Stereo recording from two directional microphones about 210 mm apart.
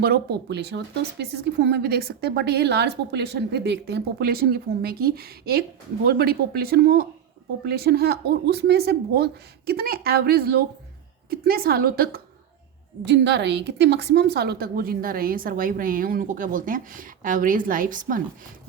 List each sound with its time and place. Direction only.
0.0 s a woman's voice: 50° right (ahead or behind)